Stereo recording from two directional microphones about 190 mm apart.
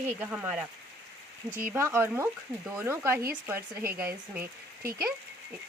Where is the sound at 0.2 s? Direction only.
10° right (ahead or behind).